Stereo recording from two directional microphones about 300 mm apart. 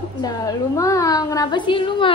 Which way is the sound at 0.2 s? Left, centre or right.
Centre.